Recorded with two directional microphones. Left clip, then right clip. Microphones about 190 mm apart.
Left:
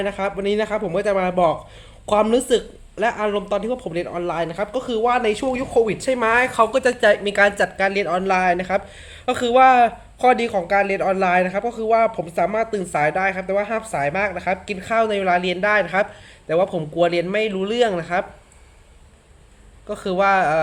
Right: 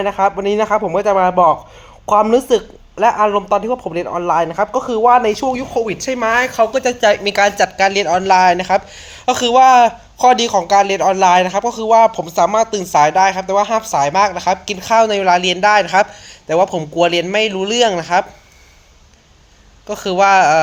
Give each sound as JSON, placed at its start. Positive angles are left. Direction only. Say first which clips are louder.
{"t": 0.0, "sound": "speech", "louder": "right 8 dB", "side_deg": 10}
{"t": 7.8, "sound": "speech", "louder": "right 6 dB", "side_deg": -70}
{"t": 8.0, "sound": "speech", "louder": "right 7 dB", "side_deg": 5}
{"t": 8.3, "sound": "speech", "louder": "right 9 dB", "side_deg": -75}
{"t": 9.3, "sound": "speech", "louder": "right 5 dB", "side_deg": 5}
{"t": 17.1, "sound": "speech", "louder": "right 5 dB", "side_deg": 0}
{"t": 20.0, "sound": "speech", "louder": "right 7 dB", "side_deg": 0}